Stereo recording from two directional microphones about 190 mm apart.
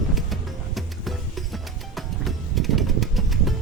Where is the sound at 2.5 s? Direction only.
Centre (ahead or behind).